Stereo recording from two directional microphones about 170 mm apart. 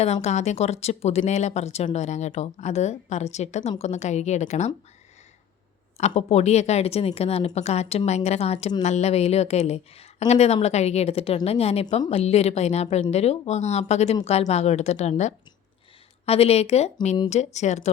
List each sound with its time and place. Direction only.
0.0 s a woman's voice: 40° left (ahead or behind)
6.0 s a woman's voice: 40° left (ahead or behind)